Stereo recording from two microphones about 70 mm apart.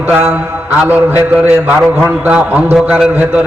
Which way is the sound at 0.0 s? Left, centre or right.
Right.